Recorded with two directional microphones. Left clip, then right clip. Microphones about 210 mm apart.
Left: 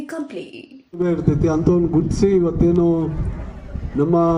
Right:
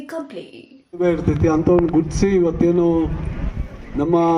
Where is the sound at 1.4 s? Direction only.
60° left (ahead or behind).